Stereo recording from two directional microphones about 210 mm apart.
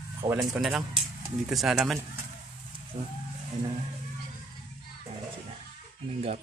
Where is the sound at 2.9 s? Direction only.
35° right (ahead or behind).